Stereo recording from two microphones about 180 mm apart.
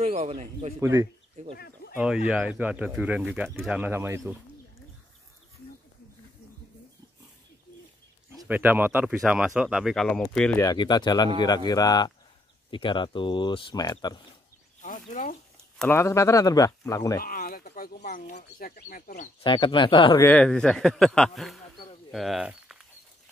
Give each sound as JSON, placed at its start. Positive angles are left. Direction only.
{"t": 0.0, "sound": "speech", "side_deg": -35}
{"t": 0.7, "sound": "speech", "side_deg": -15}
{"t": 1.4, "sound": "speech", "side_deg": -45}
{"t": 2.2, "sound": "speech", "side_deg": -5}
{"t": 8.5, "sound": "speech", "side_deg": -10}
{"t": 10.6, "sound": "speech", "side_deg": 20}
{"t": 14.8, "sound": "a sound", "side_deg": 45}
{"t": 15.8, "sound": "speech", "side_deg": 15}
{"t": 17.2, "sound": "a sound", "side_deg": 55}
{"t": 18.8, "sound": "speech", "side_deg": 50}
{"t": 19.4, "sound": "speech", "side_deg": 30}
{"t": 20.2, "sound": "speech", "side_deg": 10}